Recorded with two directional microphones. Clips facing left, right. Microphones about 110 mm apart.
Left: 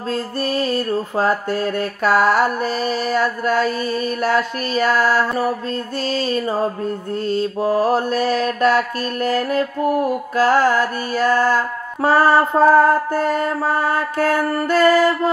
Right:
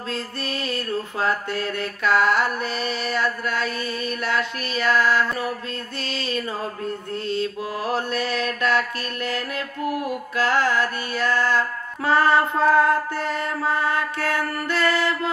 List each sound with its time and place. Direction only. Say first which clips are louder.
0.1 s mantra: left 9 dB; 40° left (ahead or behind)